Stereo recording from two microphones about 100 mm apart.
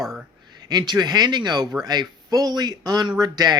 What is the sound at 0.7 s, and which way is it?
Speech, 45° right (ahead or behind).